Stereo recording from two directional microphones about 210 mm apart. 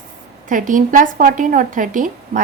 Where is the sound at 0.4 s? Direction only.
40° right (ahead or behind).